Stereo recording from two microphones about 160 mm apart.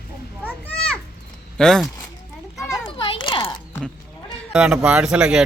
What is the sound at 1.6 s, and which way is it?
Speech, 5° left (ahead or behind).